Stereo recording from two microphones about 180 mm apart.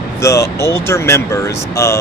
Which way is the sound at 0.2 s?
15° left (ahead or behind).